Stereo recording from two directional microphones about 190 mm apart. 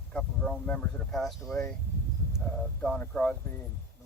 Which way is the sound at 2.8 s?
5° left (ahead or behind).